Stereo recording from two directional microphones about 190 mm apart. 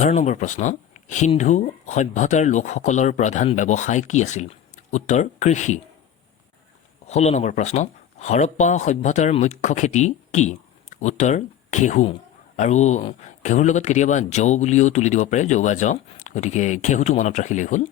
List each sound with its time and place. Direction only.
0.0 s speech: 40° left (ahead or behind)
7.1 s speech: 35° left (ahead or behind)